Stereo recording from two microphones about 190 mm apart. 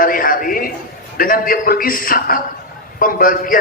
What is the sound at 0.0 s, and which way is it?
A man's voice, 50° left (ahead or behind).